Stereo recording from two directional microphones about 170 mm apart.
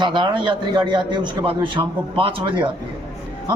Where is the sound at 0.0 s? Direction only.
25° right (ahead or behind).